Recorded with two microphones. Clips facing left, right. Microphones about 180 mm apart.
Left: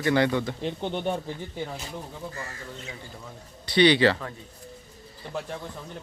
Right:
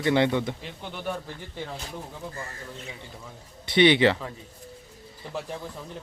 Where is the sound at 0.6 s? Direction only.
30° left (ahead or behind).